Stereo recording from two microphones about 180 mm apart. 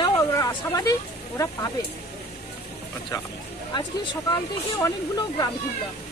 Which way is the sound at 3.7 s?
25° left (ahead or behind).